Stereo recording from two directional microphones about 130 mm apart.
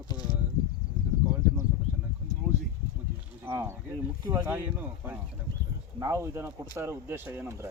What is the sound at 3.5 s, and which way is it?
Speech, 20° right (ahead or behind).